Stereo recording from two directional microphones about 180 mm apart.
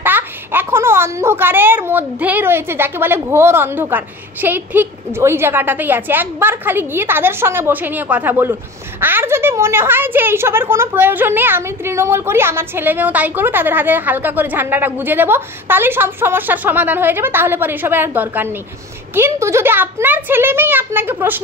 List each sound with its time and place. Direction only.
0.0 s a woman's voice: 10° right (ahead or behind)